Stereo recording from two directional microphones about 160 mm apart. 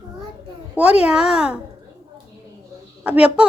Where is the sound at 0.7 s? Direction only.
10° right (ahead or behind).